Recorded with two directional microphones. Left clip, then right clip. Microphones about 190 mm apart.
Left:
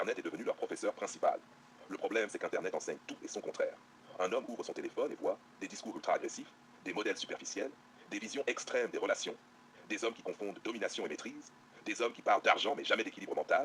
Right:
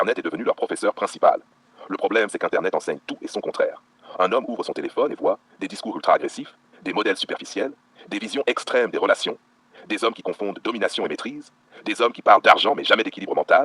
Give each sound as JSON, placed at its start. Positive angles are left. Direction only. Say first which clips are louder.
{"t": 0.0, "sound": "speech", "louder": "right 15 dB", "side_deg": -40}